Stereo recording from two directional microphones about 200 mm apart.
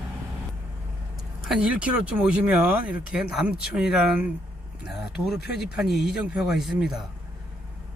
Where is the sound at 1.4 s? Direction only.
5° right (ahead or behind).